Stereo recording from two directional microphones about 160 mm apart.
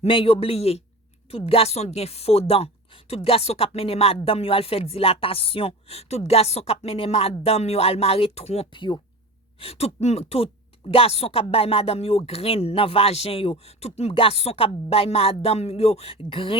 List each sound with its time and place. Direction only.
0.0 s speech: 35° left (ahead or behind)